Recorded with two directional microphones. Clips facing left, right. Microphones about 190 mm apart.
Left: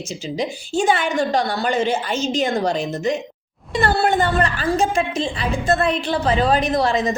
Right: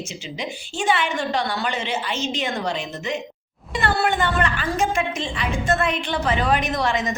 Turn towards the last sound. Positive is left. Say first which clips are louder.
# left 4 dB
turn(degrees=35)  # may be behind; listen again after turning